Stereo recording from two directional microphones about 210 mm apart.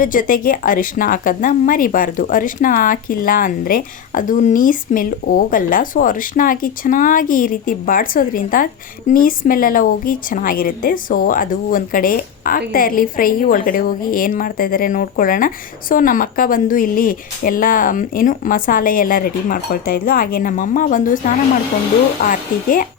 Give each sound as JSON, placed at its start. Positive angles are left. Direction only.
{"t": 0.0, "sound": "a woman's voice", "side_deg": 40}
{"t": 22.3, "sound": "a woman's voice", "side_deg": 40}